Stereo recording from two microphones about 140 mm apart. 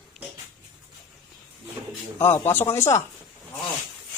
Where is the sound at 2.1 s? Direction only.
15° left (ahead or behind).